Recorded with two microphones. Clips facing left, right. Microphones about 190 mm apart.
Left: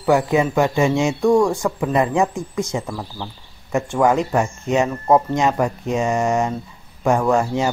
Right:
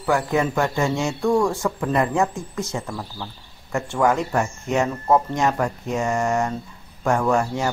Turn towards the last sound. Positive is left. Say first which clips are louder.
# left 3 dB
turn(degrees=20)  # may be behind; listen again after turning